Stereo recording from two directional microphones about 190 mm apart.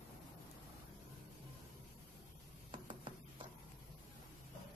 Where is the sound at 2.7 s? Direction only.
25° right (ahead or behind).